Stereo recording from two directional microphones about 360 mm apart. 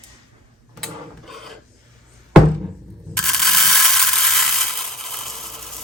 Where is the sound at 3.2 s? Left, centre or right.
Centre.